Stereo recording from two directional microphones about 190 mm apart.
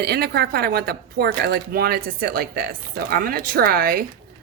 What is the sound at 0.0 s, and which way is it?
Speech, 55° right (ahead or behind).